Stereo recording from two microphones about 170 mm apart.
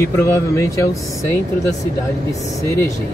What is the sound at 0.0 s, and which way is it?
Speech, 15° left (ahead or behind).